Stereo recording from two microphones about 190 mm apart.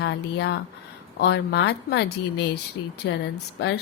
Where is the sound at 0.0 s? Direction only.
60° left (ahead or behind).